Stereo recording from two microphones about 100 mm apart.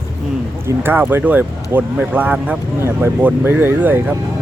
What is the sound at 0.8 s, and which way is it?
Speech, 20° right (ahead or behind).